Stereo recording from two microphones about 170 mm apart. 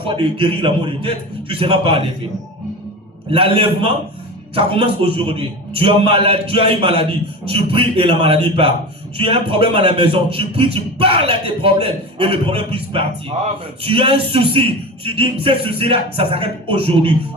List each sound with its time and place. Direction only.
0.0 s a man's voice: 30° right (ahead or behind)
3.2 s a man's voice: 35° right (ahead or behind)